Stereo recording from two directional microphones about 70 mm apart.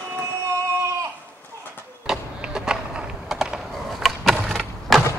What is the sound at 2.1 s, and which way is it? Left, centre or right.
Skateboard, centre.